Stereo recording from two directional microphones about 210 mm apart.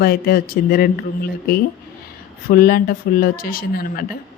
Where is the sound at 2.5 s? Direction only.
45° left (ahead or behind).